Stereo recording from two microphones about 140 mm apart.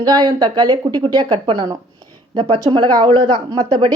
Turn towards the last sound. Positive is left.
turn(degrees=-30)  # may be behind; listen again after turning